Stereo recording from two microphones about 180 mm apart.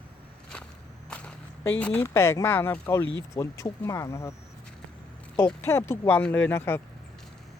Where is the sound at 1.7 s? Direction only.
10° left (ahead or behind).